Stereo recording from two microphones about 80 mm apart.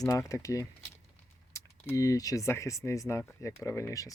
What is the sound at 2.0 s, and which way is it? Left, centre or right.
Speech, left.